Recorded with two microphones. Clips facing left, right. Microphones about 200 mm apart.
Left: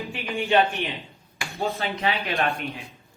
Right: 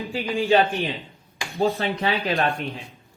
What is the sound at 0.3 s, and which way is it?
Speech, 90° right.